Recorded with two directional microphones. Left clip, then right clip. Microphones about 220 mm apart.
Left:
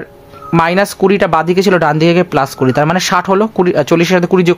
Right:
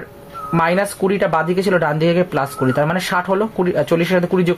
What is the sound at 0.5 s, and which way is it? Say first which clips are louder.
Speech: left 5 dB; 50° left (ahead or behind).